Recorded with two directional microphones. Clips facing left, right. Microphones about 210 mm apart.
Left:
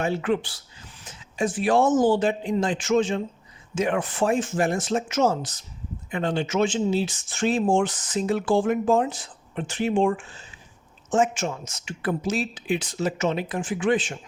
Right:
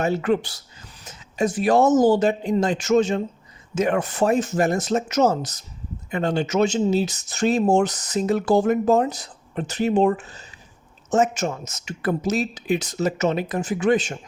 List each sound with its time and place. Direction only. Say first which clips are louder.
0.0 s speech: right 3 dB; 40° right (ahead or behind)